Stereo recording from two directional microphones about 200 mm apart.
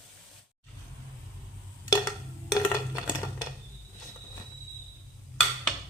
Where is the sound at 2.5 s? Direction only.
15° left (ahead or behind).